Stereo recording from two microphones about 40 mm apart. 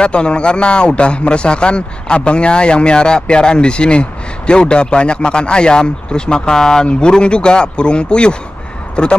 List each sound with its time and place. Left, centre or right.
0.0 s a man's voice: left